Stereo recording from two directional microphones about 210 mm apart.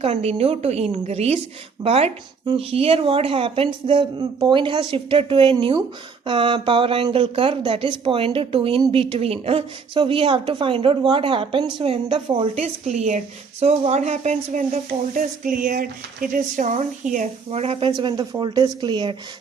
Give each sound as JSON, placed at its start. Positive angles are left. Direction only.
{"t": 0.0, "sound": "speech", "side_deg": -30}
{"t": 12.5, "sound": "a woman's voice", "side_deg": -35}